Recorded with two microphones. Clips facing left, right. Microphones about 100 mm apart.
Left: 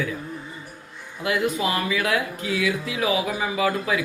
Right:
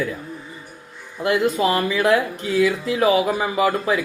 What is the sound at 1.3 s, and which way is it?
A man's voice, 40° right (ahead or behind).